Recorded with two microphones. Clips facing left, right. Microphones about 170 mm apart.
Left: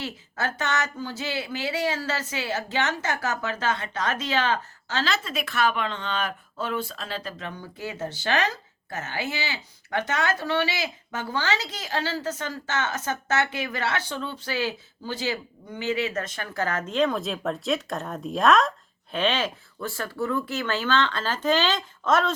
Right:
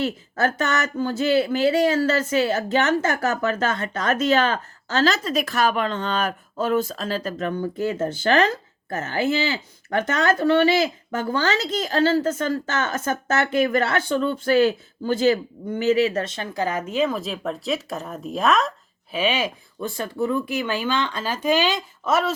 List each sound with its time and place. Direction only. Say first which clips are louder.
0.4 s speech: right 5 dB; 50° right (ahead or behind); by 22.4 s 10° right (ahead or behind)